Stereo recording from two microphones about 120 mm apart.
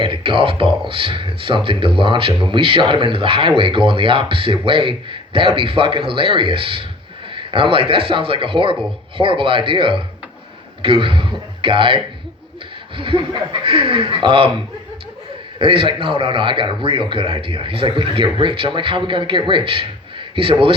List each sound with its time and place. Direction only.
0.0 s speech: 45° right (ahead or behind)
15.5 s speech: 45° right (ahead or behind)